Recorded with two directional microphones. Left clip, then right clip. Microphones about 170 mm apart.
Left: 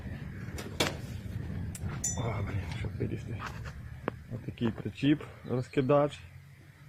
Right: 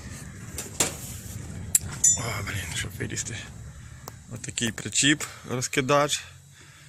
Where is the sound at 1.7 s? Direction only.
Centre (ahead or behind).